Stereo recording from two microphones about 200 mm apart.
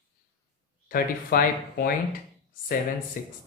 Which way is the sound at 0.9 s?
45° left (ahead or behind).